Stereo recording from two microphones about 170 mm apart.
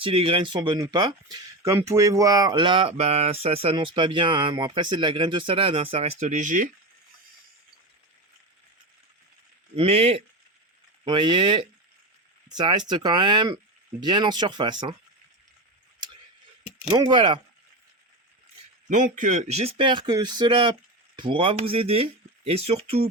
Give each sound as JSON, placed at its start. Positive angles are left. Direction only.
{"t": 0.0, "sound": "speech", "side_deg": -30}
{"t": 9.7, "sound": "speech", "side_deg": -35}
{"t": 17.1, "sound": "speech", "side_deg": -25}
{"t": 18.9, "sound": "speech", "side_deg": -45}